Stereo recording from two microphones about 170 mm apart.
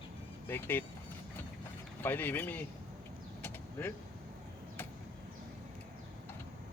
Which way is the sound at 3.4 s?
10° left (ahead or behind).